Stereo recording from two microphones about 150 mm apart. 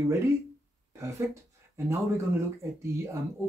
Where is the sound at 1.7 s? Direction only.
20° right (ahead or behind).